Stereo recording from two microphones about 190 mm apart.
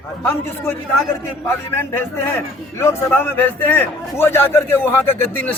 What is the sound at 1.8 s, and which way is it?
A man's voice, 10° left (ahead or behind).